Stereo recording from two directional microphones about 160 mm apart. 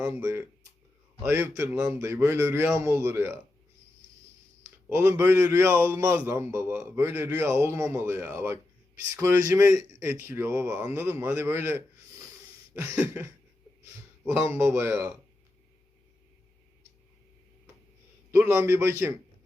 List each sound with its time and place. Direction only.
0.0 s a man's voice: 15° right (ahead or behind)
1.7 s speech: 5° right (ahead or behind)
2.0 s a man's voice: 15° right (ahead or behind)
4.6 s a man's voice: 15° right (ahead or behind)
18.3 s a man's voice: 15° right (ahead or behind)